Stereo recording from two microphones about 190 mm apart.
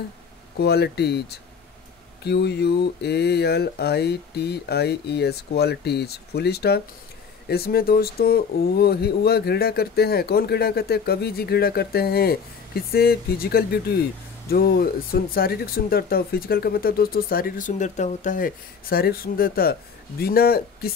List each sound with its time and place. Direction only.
0.6 s speech: 60° left (ahead or behind)